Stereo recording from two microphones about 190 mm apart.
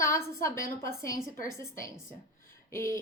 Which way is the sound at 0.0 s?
15° left (ahead or behind).